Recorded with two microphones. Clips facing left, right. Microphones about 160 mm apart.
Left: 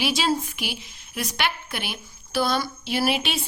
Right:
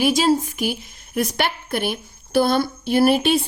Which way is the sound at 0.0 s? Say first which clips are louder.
Right 6 dB; 45° right (ahead or behind).